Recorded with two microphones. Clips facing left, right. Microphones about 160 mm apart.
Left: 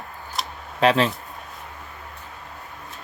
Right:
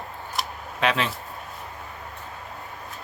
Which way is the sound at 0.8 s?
35° left (ahead or behind).